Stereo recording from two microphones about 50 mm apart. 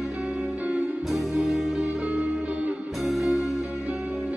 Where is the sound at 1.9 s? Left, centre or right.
Right.